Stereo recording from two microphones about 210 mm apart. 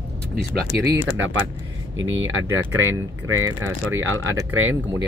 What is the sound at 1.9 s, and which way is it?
Speech, 65° right (ahead or behind).